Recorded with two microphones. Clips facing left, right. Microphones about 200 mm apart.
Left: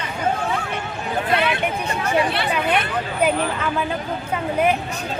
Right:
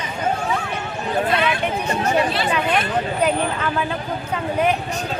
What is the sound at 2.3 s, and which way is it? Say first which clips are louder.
Speech: right 1 dB; 65° left (ahead or behind).